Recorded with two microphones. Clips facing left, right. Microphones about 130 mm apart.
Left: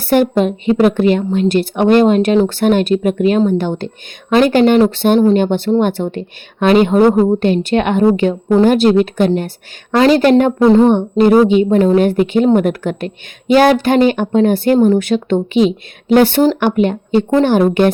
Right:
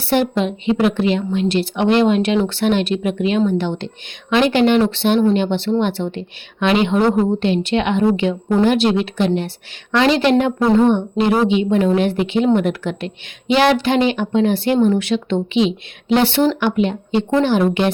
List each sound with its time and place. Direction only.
0.0 s a woman's voice: 50° left (ahead or behind)